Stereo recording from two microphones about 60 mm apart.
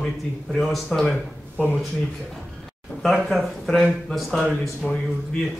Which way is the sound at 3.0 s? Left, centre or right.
Centre.